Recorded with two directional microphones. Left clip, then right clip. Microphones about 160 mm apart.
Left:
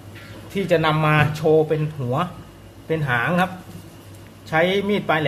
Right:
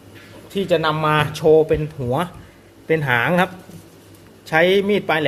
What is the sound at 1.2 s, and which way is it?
Speech, 40° right (ahead or behind).